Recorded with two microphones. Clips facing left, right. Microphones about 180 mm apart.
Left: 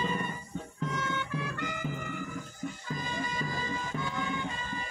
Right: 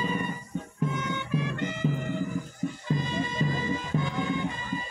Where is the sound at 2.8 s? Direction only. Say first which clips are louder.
Right 7 dB; 25° right (ahead or behind).